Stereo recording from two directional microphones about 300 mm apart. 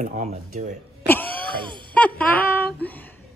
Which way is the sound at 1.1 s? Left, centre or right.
Centre.